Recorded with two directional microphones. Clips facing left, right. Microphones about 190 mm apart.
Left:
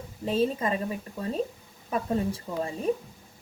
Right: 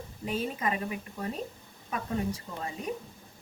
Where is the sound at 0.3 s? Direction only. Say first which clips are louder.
Left 6 dB; 30° left (ahead or behind).